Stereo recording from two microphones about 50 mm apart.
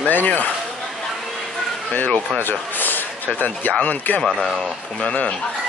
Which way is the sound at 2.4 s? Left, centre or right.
Left.